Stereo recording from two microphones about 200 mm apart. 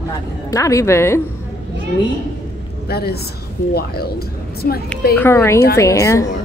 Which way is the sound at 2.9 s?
50° left (ahead or behind).